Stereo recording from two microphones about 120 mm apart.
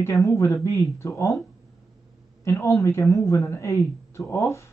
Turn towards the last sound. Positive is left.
turn(degrees=25)  # may be behind; listen again after turning